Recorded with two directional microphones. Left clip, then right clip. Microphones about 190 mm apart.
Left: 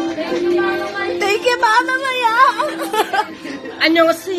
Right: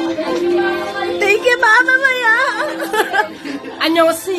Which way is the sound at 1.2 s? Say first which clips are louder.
Right 3 dB; 25° right (ahead or behind).